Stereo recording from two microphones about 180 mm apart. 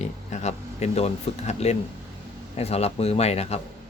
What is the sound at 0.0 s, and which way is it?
Speech, 40° left (ahead or behind).